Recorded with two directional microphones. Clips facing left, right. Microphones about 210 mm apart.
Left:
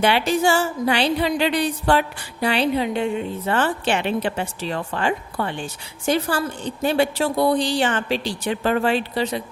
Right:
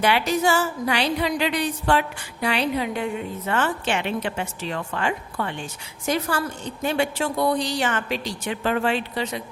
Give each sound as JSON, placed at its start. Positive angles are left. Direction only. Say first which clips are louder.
{"t": 0.0, "sound": "music", "louder": "left 2 dB", "side_deg": 30}